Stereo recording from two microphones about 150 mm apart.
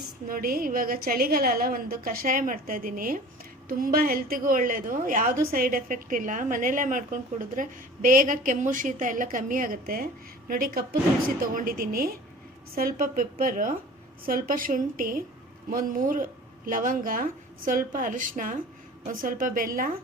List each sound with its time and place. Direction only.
0.3 s a woman's voice: 75° right (ahead or behind)